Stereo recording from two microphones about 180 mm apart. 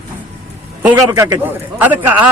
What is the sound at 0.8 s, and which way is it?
A man's voice, 15° right (ahead or behind).